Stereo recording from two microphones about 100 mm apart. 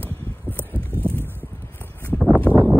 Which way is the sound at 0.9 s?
20° right (ahead or behind).